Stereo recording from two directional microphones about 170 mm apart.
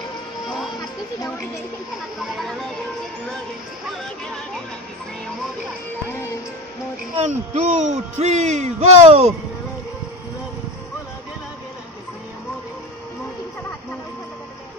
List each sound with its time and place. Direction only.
7.2 s speech: 45° right (ahead or behind)